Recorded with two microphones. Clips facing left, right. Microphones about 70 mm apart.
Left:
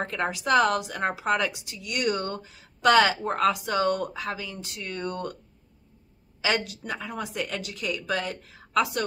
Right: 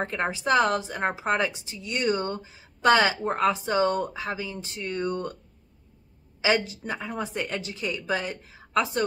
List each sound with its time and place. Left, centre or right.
0.1 s a woman's voice: right
6.4 s a woman's voice: right